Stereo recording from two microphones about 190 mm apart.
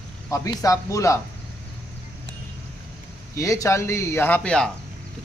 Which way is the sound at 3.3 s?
15° left (ahead or behind).